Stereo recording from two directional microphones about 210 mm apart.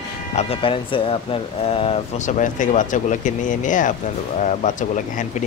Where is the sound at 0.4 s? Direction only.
25° left (ahead or behind).